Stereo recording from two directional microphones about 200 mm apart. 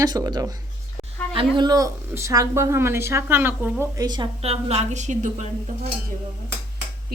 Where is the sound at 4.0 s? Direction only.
20° right (ahead or behind).